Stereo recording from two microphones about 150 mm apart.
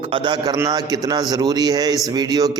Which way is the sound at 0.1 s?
30° right (ahead or behind).